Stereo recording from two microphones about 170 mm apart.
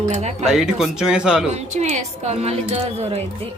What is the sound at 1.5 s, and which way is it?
A woman's voice, 40° right (ahead or behind).